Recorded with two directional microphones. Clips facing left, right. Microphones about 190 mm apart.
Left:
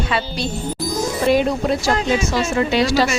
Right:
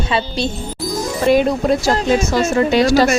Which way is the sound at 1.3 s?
50° right (ahead or behind).